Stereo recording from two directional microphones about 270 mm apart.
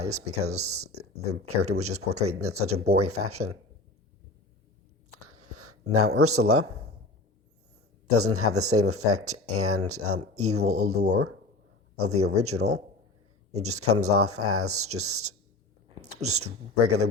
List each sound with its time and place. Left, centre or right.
0.0 s speech: right
0.5 s speech: right
0.9 s speech: right
5.1 s a sound: right
8.1 s speech: right
11.9 s speech: right